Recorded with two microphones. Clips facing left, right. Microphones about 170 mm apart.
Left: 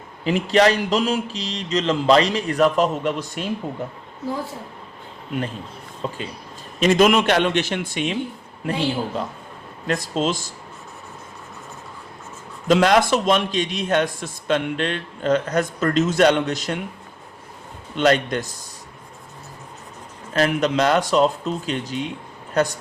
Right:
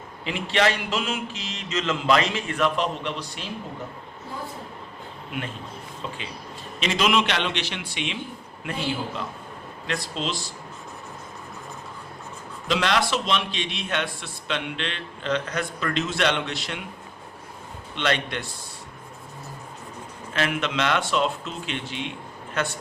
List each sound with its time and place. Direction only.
0.3 s speech: 40° left (ahead or behind)
6.0 s a man's voice: 40° left (ahead or behind)
9.8 s a man's voice: 45° left (ahead or behind)
12.6 s a man's voice: 45° left (ahead or behind)
17.9 s speech: 40° left (ahead or behind)
20.3 s speech: 40° left (ahead or behind)